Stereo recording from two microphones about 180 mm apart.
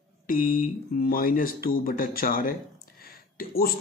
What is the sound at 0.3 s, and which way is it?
A man's voice, 50° left (ahead or behind).